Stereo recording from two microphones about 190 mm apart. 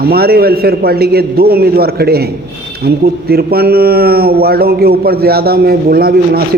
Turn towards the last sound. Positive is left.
turn(degrees=-50)  # may be behind; listen again after turning